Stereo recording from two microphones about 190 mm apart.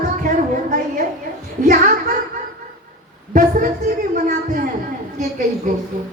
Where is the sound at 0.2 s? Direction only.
45° right (ahead or behind).